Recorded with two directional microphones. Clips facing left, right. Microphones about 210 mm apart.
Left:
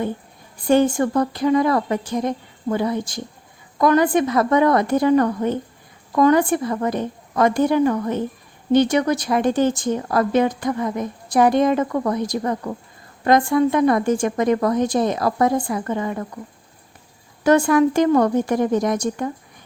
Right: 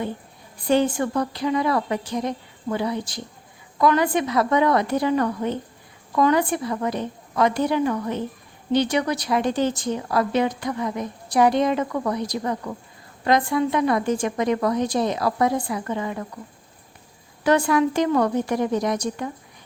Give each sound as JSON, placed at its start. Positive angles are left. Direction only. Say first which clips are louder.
{"t": 0.7, "sound": "speech", "louder": "left 4 dB", "side_deg": 45}
{"t": 17.4, "sound": "speech", "louder": "left 4 dB", "side_deg": 45}